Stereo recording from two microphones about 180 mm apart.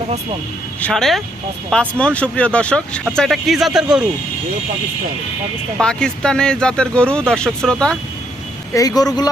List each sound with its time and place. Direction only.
0.8 s speech: 5° left (ahead or behind)
5.8 s speech: 5° left (ahead or behind)
8.7 s speech: 20° left (ahead or behind)